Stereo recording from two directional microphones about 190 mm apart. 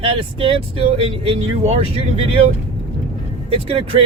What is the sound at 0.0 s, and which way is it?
Speech, 30° right (ahead or behind).